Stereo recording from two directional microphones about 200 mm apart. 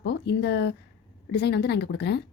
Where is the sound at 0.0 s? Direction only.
55° left (ahead or behind).